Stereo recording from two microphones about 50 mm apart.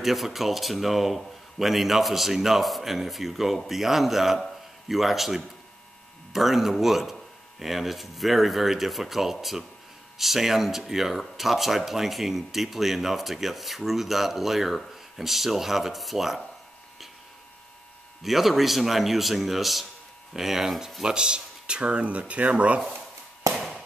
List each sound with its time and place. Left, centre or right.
0.0 s speech: centre
18.2 s speech: centre
21.0 s speech: centre